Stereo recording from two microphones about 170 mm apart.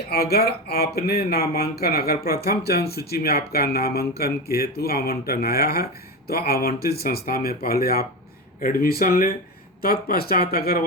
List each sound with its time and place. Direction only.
0.1 s speech: 65° left (ahead or behind)